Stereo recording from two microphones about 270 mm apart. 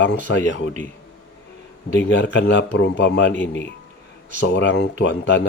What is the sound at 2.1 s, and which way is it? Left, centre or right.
A man's voice, left.